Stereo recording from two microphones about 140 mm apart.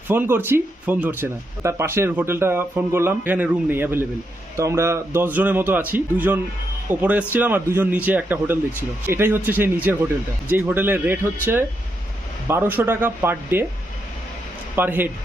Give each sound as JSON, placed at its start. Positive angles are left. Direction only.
{"t": 0.1, "sound": "speech", "side_deg": -15}
{"t": 14.8, "sound": "speech", "side_deg": -15}